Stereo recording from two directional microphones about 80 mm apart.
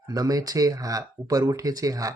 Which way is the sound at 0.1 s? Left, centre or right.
Right.